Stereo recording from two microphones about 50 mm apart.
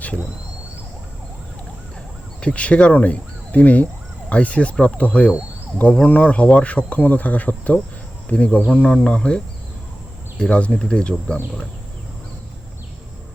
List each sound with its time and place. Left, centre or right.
2.4 s speech: left